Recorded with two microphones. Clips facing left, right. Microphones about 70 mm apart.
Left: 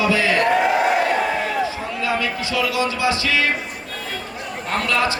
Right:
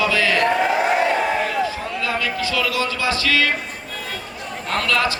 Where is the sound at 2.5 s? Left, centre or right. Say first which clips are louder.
Left 3 dB; left.